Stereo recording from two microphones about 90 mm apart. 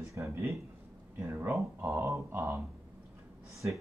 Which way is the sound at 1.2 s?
20° right (ahead or behind).